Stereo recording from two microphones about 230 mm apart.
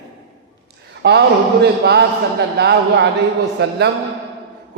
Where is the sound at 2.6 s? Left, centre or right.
Right.